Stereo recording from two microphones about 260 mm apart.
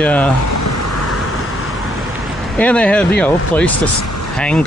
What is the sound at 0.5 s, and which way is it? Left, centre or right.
Vehicle, left.